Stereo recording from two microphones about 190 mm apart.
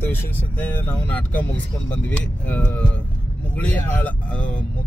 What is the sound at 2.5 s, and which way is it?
Speech, 10° left (ahead or behind).